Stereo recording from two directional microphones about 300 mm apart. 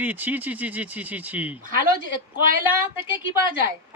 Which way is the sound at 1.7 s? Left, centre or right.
Right.